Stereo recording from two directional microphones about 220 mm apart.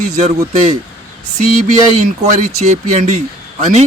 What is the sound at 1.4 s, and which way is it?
Speech, 30° right (ahead or behind).